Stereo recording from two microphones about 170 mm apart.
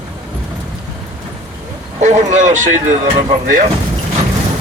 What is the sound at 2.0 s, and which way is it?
Speech, 45° right (ahead or behind).